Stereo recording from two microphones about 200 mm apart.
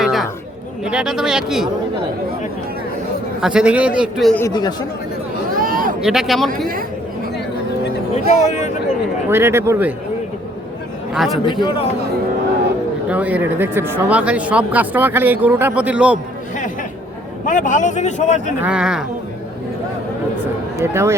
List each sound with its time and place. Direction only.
0.0 s a sound: centre (ahead or behind)
0.9 s a man's voice: 5° right (ahead or behind)
3.4 s a man's voice: 5° right (ahead or behind)
4.4 s speech: 20° left (ahead or behind)
5.5 s a sound: 45° right (ahead or behind)
6.0 s a man's voice: centre (ahead or behind)
8.1 s a man's voice: 35° left (ahead or behind)
9.3 s speech: 10° right (ahead or behind)
11.1 s speech: centre (ahead or behind)
11.4 s speech: 25° left (ahead or behind)
13.1 s speech: 5° right (ahead or behind)
17.4 s a man's voice: 40° left (ahead or behind)
18.6 s a man's voice: 5° right (ahead or behind)
20.8 s speech: 15° right (ahead or behind)